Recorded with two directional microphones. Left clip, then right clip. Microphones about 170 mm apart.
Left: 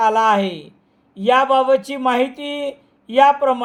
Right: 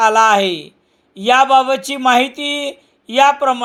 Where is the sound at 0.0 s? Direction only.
25° right (ahead or behind).